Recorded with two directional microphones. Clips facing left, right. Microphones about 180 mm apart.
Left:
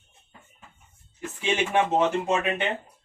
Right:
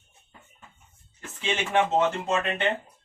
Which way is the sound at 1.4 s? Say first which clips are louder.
Left 1 dB; 15° left (ahead or behind).